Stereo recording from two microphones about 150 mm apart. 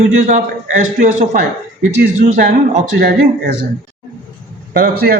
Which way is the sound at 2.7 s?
70° right (ahead or behind).